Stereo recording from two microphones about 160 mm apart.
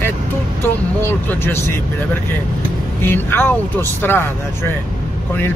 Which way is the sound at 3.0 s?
15° left (ahead or behind).